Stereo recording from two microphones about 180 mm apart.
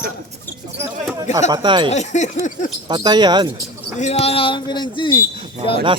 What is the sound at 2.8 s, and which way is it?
Speech, 25° right (ahead or behind).